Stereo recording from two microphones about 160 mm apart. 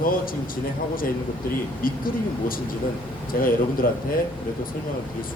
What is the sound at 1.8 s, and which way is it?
A man's voice, 65° left (ahead or behind).